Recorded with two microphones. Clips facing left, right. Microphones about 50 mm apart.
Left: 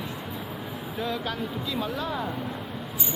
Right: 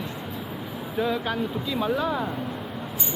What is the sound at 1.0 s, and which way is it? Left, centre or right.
Speech, centre.